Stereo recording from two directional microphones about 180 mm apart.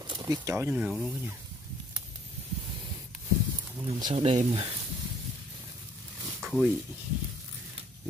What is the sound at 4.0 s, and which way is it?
Speech, 30° right (ahead or behind).